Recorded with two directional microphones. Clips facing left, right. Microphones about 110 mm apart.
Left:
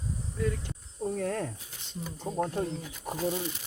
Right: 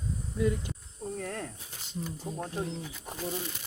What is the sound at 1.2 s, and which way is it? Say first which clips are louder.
Speech: left 5 dB; 45° left (ahead or behind).